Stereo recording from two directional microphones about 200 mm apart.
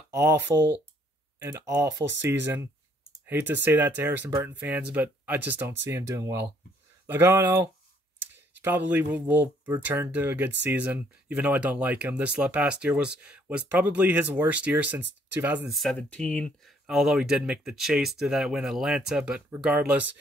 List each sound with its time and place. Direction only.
0.1 s speech: 10° right (ahead or behind)
1.7 s speech: 15° right (ahead or behind)
2.0 s speech: 60° right (ahead or behind)
2.4 s speech: 10° right (ahead or behind)